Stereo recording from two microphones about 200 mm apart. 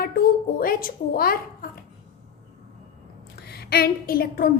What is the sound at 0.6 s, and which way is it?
A woman's voice, 45° left (ahead or behind).